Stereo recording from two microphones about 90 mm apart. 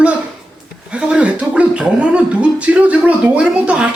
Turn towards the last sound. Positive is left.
turn(degrees=-10)  # may be behind; listen again after turning